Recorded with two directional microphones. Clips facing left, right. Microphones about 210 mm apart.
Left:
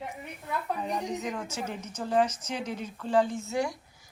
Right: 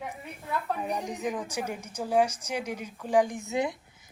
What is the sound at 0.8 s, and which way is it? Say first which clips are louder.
A woman's voice: even; 10° right (ahead or behind).